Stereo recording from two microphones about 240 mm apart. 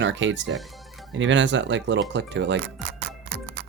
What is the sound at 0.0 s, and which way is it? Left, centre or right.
Speech, right.